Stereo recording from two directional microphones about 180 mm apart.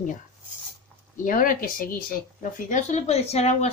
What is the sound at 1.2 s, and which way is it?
Speech, 50° left (ahead or behind).